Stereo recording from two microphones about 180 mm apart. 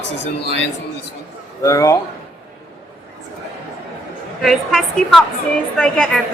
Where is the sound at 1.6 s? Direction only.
20° left (ahead or behind).